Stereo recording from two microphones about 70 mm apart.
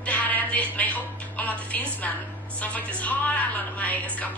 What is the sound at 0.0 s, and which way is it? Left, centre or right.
Music, left.